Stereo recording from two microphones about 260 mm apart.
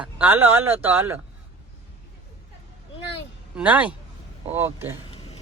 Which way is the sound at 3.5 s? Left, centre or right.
Centre.